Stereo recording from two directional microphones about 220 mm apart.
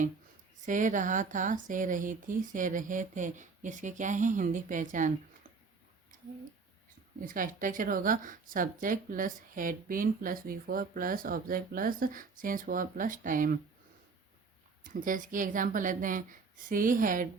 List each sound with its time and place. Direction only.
0.6 s speech: 35° right (ahead or behind)
7.2 s speech: 40° right (ahead or behind)
15.0 s speech: 35° right (ahead or behind)